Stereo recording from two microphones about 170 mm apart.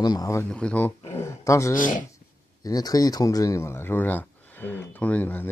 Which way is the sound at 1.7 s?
50° left (ahead or behind).